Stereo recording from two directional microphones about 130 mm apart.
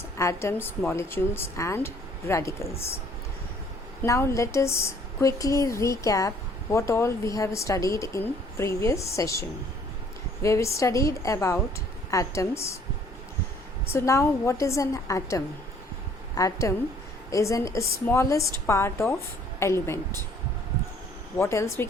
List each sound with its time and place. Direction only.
0.2 s speech: 20° left (ahead or behind)
4.0 s speech: 25° left (ahead or behind)
13.9 s speech: 25° left (ahead or behind)
21.3 s speech: 20° left (ahead or behind)